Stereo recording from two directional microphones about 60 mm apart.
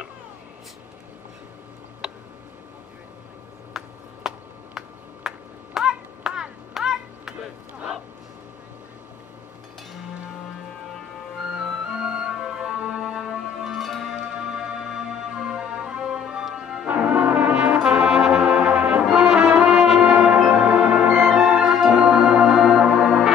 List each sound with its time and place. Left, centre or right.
3.8 s a sound: centre
5.8 s clapping: centre
11.5 s music: centre
14.1 s music: centre
16.8 s brass instrument: right; by 19.4 s centre
19.4 s music: centre